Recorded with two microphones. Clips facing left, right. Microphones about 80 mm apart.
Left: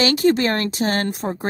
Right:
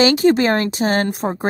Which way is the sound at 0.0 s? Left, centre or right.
Right.